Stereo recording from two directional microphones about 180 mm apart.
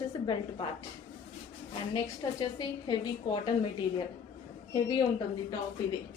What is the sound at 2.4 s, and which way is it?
A woman's voice, 25° left (ahead or behind).